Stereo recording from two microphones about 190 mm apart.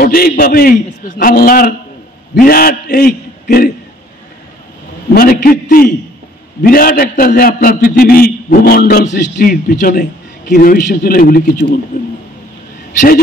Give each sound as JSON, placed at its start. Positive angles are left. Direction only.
{"t": 0.0, "sound": "a man's voice", "side_deg": 50}
{"t": 5.1, "sound": "a man's voice", "side_deg": 50}